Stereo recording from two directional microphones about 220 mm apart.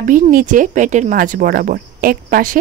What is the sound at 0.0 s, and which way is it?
Speech, 35° right (ahead or behind).